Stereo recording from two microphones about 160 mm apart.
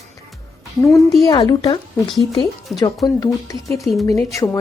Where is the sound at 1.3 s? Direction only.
30° left (ahead or behind).